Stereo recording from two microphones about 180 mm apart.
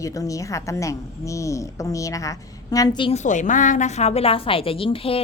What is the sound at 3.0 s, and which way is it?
Speech, 40° left (ahead or behind).